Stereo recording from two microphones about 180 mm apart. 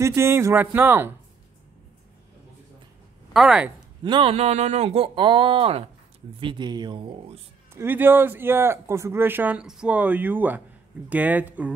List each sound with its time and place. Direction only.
0.0 s speech: 15° right (ahead or behind)
3.3 s speech: 5° right (ahead or behind)
4.0 s speech: 30° right (ahead or behind)
7.7 s speech: 10° right (ahead or behind)